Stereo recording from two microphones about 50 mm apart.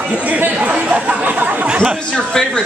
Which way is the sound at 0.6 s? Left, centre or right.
Right.